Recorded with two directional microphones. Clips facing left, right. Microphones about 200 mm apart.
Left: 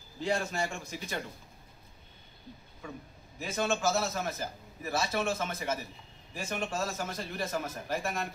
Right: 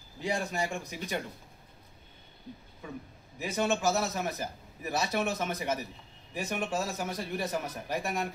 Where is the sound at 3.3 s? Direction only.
15° right (ahead or behind).